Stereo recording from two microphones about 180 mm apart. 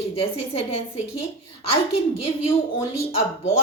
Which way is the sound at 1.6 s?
35° left (ahead or behind).